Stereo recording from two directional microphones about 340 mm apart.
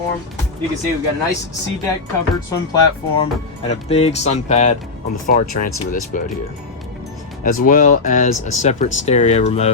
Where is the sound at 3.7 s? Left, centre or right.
Centre.